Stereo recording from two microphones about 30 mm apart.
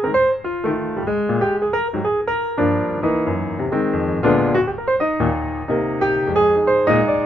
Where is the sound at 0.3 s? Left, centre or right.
Centre.